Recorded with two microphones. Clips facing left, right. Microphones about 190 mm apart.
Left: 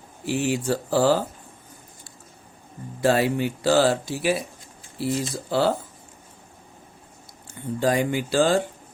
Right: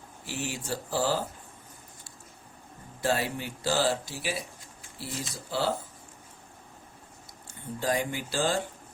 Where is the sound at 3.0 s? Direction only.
80° left; by 4.4 s 60° left (ahead or behind).